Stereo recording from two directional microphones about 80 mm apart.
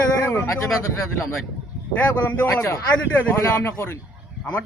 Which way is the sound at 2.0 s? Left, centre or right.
Left.